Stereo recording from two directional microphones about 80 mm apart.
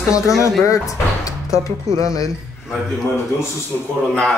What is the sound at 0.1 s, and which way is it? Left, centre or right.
Speech, left.